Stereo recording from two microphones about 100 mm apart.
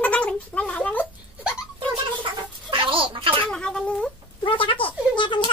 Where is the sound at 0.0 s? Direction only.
15° left (ahead or behind).